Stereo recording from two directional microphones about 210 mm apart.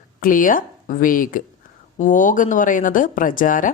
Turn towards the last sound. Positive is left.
turn(degrees=40)  # may be behind; listen again after turning